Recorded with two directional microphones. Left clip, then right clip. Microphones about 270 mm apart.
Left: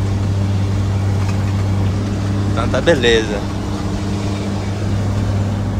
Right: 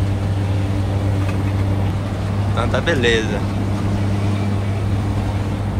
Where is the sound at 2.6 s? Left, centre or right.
Centre.